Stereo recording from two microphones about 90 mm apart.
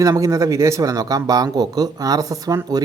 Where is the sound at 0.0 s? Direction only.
35° right (ahead or behind).